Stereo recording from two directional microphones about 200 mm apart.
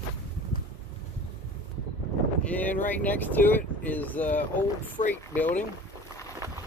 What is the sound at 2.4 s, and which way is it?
Wind, 5° left (ahead or behind).